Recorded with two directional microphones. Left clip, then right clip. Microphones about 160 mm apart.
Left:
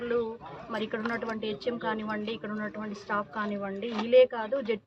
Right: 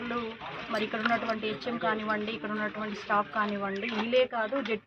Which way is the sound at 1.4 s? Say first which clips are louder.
Even; 30° left (ahead or behind).